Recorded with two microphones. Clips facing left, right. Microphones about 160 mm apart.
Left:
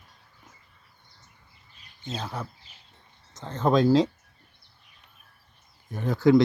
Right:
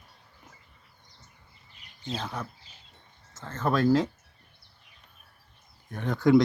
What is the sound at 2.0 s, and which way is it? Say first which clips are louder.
Speech: even; 5° left (ahead or behind).